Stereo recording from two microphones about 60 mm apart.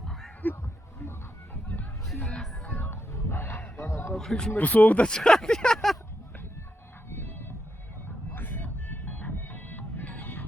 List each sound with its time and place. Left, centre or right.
0.0 s a sound: centre
2.7 s music: left
3.1 s wild animals: left
4.2 s speech: centre
4.5 s speech: left; by 6.0 s centre
7.1 s a sound: left
8.3 s music: left